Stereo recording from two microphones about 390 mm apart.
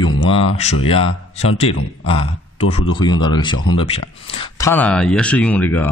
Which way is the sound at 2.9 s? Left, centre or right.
Centre.